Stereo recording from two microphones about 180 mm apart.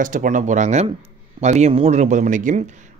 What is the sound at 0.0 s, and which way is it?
Speech, 45° right (ahead or behind).